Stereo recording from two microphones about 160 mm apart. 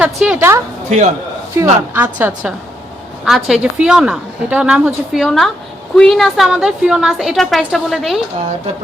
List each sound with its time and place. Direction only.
0.0 s a woman's voice: 5° right (ahead or behind)
0.9 s speech: 45° right (ahead or behind)
1.6 s a woman's voice: 20° right (ahead or behind); by 8.2 s centre (ahead or behind)